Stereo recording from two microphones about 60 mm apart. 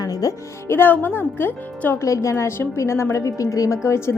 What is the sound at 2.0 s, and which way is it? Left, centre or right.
A woman's voice, left.